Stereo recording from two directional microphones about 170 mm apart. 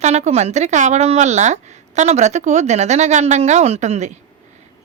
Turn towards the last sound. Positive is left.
turn(degrees=-40)  # may be behind; listen again after turning